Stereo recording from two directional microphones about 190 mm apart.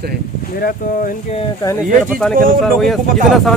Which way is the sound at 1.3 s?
30° left (ahead or behind).